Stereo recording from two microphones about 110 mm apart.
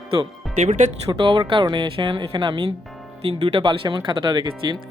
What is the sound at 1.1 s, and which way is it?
Speech, 50° right (ahead or behind).